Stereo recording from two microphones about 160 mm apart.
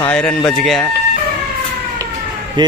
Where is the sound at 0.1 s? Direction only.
10° left (ahead or behind).